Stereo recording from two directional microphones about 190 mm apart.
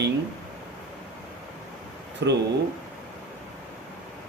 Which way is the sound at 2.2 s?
65° right (ahead or behind).